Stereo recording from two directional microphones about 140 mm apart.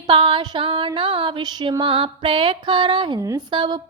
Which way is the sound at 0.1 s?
35° right (ahead or behind).